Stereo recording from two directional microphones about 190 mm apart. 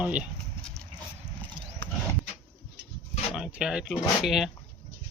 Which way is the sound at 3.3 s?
5° right (ahead or behind).